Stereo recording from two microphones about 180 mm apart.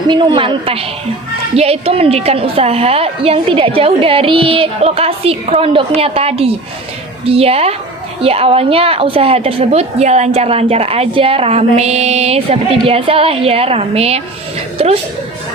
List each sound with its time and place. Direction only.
0.1 s a woman's voice: 25° right (ahead or behind)